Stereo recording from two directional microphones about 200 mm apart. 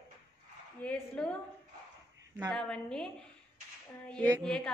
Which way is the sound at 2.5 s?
5° left (ahead or behind).